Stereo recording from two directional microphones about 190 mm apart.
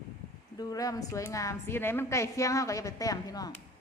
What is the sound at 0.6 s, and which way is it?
A woman's voice, 20° left (ahead or behind).